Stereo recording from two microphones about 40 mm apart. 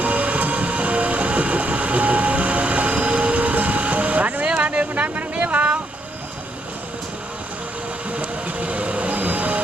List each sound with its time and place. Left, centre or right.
0.0 s train: right
4.4 s a sound: right
8.1 s music: right